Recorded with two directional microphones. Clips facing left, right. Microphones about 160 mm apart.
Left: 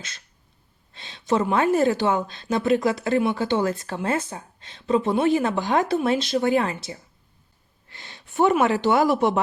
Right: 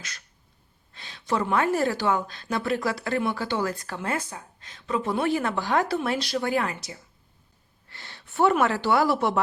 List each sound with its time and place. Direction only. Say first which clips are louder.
0.9 s a woman's voice: left 4 dB; 25° left (ahead or behind)